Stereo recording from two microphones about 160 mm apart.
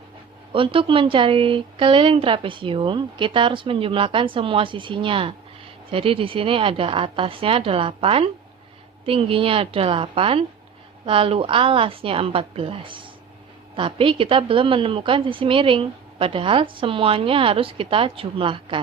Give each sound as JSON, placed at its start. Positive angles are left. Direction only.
{"t": 0.5, "sound": "a woman's voice", "side_deg": -35}